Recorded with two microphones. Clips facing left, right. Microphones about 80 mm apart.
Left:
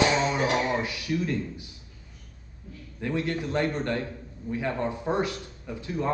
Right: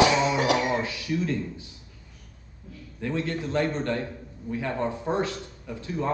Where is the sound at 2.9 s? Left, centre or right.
Centre.